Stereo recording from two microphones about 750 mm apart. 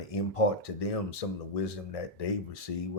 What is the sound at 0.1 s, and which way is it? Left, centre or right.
Speech, left.